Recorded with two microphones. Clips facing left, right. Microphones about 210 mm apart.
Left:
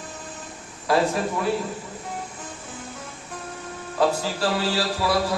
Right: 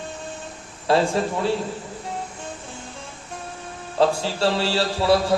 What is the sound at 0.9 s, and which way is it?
Speech, 30° right (ahead or behind).